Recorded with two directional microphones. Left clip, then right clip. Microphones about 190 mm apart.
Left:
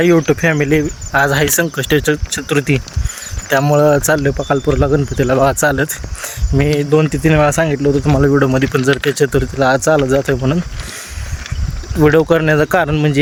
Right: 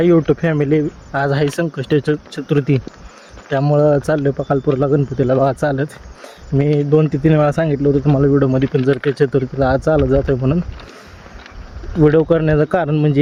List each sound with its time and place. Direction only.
0.0 s speech: 5° left (ahead or behind)
11.9 s speech: 10° left (ahead or behind)